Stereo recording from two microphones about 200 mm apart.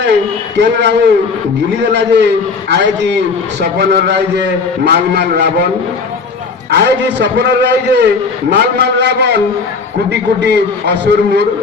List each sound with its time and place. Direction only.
0.5 s a man's voice: 60° right (ahead or behind)
6.7 s a man's voice: 60° right (ahead or behind)